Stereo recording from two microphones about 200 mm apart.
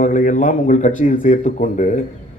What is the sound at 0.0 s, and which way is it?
A man's voice, 40° left (ahead or behind).